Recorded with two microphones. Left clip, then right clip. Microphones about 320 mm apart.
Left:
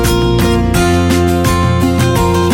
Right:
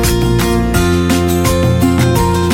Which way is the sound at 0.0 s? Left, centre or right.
Centre.